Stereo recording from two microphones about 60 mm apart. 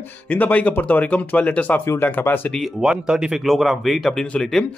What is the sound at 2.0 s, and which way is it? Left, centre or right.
Speech, left.